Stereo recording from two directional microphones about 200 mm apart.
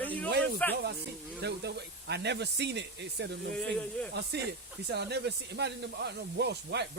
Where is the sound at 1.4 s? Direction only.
55° right (ahead or behind).